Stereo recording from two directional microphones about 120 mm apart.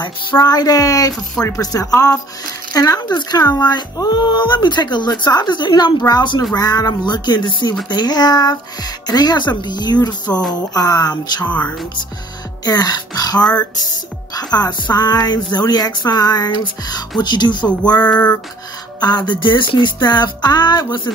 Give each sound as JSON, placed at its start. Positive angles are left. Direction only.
{"t": 0.0, "sound": "speech", "side_deg": 35}
{"t": 18.9, "sound": "speech", "side_deg": 35}